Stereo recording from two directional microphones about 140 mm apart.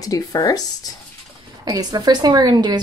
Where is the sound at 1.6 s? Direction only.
30° right (ahead or behind).